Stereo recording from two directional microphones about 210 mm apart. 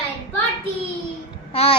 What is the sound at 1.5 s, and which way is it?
Speech, 25° left (ahead or behind).